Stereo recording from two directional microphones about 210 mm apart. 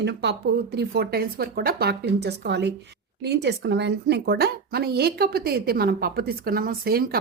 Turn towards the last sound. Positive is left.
turn(degrees=-45)  # may be behind; listen again after turning